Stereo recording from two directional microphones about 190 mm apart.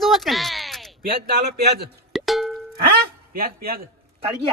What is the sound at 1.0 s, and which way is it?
Speech, 60° right (ahead or behind).